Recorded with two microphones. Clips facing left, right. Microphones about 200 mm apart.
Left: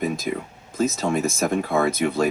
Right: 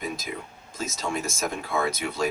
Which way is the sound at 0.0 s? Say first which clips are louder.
Left 8 dB; 55° left (ahead or behind).